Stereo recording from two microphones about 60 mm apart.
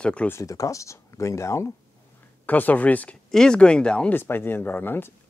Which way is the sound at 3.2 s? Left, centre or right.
Centre.